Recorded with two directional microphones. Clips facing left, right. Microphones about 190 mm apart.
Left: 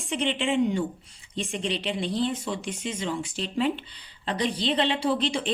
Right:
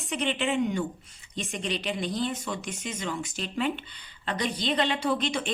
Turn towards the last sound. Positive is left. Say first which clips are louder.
# left 2 dB
turn(degrees=30)  # may be behind; listen again after turning